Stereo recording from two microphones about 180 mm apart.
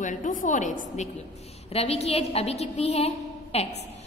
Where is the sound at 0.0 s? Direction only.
45° left (ahead or behind).